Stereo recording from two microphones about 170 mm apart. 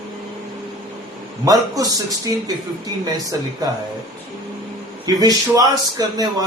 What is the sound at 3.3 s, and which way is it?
Speech, 20° right (ahead or behind).